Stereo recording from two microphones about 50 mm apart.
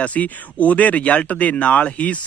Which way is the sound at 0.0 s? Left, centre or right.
Left.